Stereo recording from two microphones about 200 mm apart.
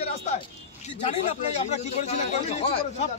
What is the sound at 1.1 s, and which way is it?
A man's voice, 35° left (ahead or behind).